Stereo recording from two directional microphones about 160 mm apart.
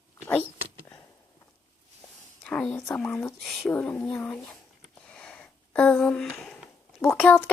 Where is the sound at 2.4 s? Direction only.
5° left (ahead or behind).